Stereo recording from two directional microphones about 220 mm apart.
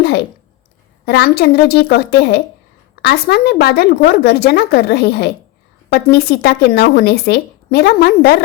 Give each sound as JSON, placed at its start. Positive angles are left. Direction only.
{"t": 1.0, "sound": "speech", "side_deg": 45}